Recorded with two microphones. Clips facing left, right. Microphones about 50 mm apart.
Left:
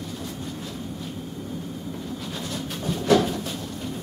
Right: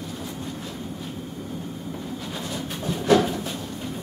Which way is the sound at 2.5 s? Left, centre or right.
Centre.